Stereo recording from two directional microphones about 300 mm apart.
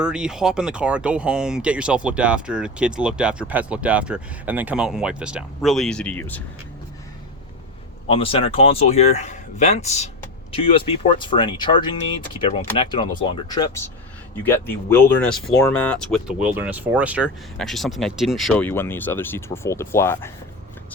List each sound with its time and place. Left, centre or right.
0.0 s speech: centre
8.1 s speech: centre